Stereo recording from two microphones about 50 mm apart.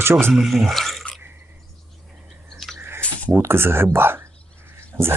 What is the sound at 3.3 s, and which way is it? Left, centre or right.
Speech, right.